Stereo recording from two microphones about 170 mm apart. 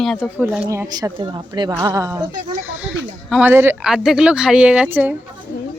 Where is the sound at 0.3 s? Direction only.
10° right (ahead or behind).